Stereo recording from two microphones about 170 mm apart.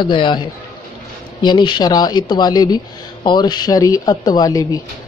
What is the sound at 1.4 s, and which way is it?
Speech, 30° left (ahead or behind).